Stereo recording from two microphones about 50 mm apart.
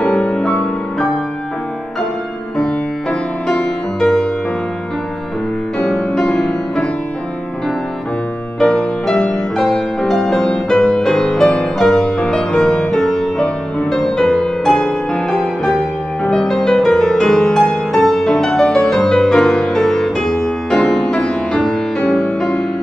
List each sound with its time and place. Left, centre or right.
0.0 s music: centre
0.4 s music: centre
2.5 s music: centre
5.8 s music: centre
8.5 s music: centre
9.7 s music: centre